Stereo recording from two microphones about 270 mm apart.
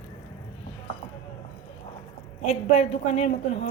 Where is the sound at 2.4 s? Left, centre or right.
Left.